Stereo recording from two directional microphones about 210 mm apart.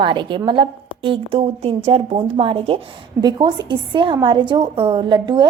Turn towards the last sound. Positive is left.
turn(degrees=-20)  # may be behind; listen again after turning